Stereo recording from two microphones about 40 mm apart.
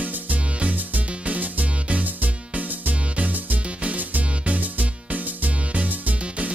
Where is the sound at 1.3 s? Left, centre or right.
Right.